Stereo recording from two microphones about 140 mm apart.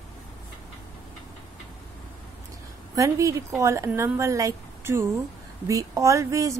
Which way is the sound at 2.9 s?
20° right (ahead or behind).